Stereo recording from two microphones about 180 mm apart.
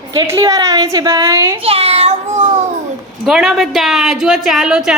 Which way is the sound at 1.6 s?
35° right (ahead or behind).